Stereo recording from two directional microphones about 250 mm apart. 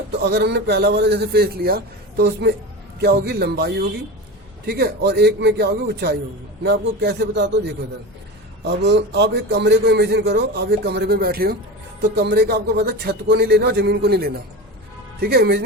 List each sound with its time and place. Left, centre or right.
0.2 s a man's voice: right
8.6 s a man's voice: right